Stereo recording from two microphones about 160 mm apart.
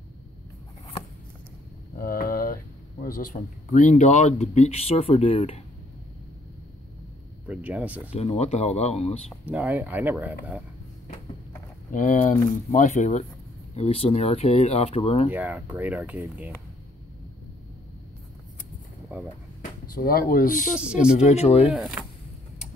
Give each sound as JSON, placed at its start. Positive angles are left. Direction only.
{"t": 2.0, "sound": "speech", "side_deg": 65}
{"t": 7.4, "sound": "speech", "side_deg": -10}
{"t": 8.1, "sound": "speech", "side_deg": 40}
{"t": 9.5, "sound": "speech", "side_deg": -10}
{"t": 11.9, "sound": "speech", "side_deg": 55}
{"t": 15.3, "sound": "speech", "side_deg": -10}
{"t": 19.9, "sound": "speech", "side_deg": 65}
{"t": 20.7, "sound": "speech", "side_deg": -5}
{"t": 21.1, "sound": "speech", "side_deg": 45}
{"t": 21.6, "sound": "speech", "side_deg": -5}